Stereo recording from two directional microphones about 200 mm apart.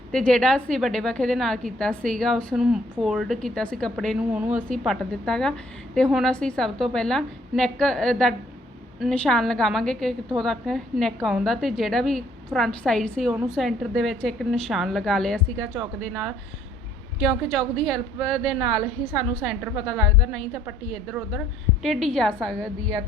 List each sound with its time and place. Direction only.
0.1 s a woman's voice: 5° left (ahead or behind)